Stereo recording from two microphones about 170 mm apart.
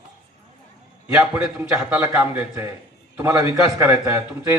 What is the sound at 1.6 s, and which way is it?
A man's voice, 15° right (ahead or behind).